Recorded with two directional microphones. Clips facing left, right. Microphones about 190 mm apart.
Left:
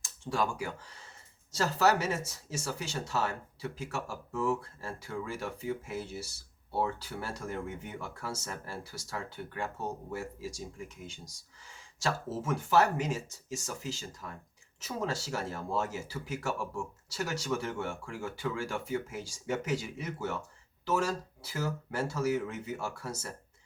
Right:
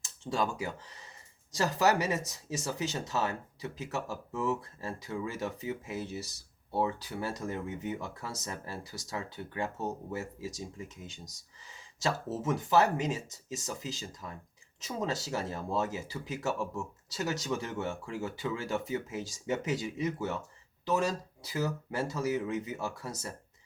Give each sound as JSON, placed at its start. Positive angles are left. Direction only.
{"t": 0.0, "sound": "speech", "side_deg": -20}